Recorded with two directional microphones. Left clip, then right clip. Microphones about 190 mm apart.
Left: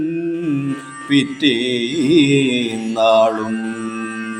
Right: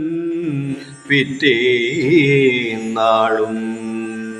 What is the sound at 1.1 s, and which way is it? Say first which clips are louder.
Mantra: right 2 dB; 45° left (ahead or behind).